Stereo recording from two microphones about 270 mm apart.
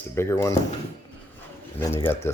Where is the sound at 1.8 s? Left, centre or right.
Centre.